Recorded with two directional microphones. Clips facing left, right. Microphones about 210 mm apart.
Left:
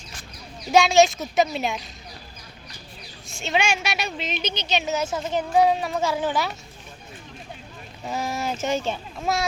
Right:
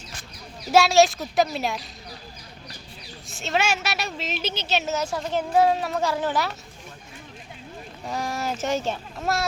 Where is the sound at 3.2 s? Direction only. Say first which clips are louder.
Left 1 dB; centre (ahead or behind).